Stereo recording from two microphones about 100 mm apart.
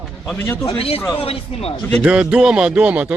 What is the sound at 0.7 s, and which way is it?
Speech, 75° left (ahead or behind).